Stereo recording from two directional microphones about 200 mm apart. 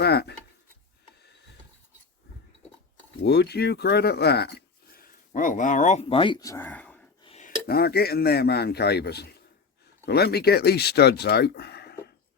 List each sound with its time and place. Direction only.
0.0 s a sound: 55° left (ahead or behind)
3.2 s speech: 55° left (ahead or behind); by 7.1 s 5° left (ahead or behind)
7.2 s dishes: 30° left (ahead or behind)
7.7 s speech: 50° left (ahead or behind)